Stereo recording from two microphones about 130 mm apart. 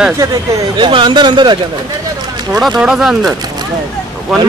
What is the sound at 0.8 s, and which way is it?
Speech, 40° right (ahead or behind).